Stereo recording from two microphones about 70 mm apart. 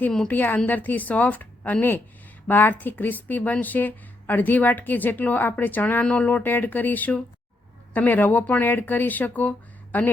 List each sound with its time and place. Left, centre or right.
0.3 s a woman's voice: left